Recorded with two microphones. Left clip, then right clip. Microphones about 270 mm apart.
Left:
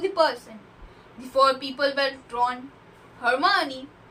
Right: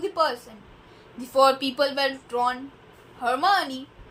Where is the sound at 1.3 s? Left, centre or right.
Right.